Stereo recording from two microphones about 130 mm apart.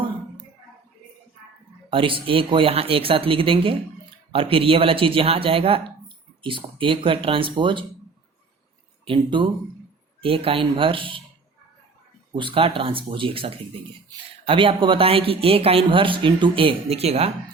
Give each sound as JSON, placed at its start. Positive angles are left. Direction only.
{"t": 1.9, "sound": "speech", "side_deg": -45}
{"t": 9.0, "sound": "speech", "side_deg": -40}
{"t": 12.3, "sound": "speech", "side_deg": -40}